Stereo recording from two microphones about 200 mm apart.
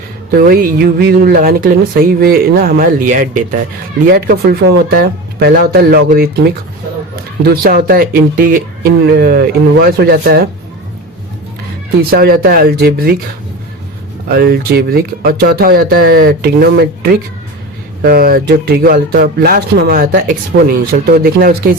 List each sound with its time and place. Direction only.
0.3 s speech: 50° right (ahead or behind)
7.5 s speech: 50° right (ahead or behind)
12.1 s speech: 50° right (ahead or behind)
14.3 s speech: 50° right (ahead or behind)